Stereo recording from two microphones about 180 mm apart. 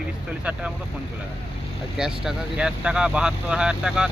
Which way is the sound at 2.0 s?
5° right (ahead or behind).